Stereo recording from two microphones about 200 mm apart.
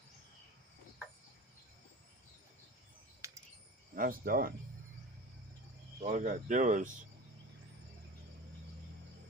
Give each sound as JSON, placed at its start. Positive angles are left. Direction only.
{"t": 3.2, "sound": "bird", "side_deg": -15}
{"t": 3.9, "sound": "speech", "side_deg": -45}
{"t": 6.0, "sound": "speech", "side_deg": -40}